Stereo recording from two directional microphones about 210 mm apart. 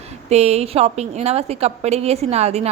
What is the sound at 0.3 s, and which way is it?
A woman's voice, 30° right (ahead or behind).